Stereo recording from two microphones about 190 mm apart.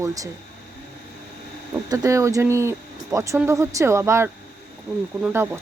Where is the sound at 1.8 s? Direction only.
15° right (ahead or behind).